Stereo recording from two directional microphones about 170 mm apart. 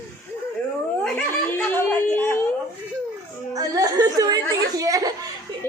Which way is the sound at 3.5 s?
20° right (ahead or behind).